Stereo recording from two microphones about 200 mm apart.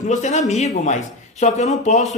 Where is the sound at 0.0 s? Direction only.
35° left (ahead or behind).